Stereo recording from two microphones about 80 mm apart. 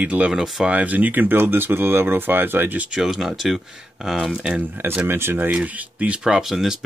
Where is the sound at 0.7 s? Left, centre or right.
Centre.